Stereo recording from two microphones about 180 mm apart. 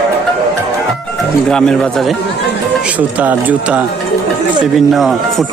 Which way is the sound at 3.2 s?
10° right (ahead or behind).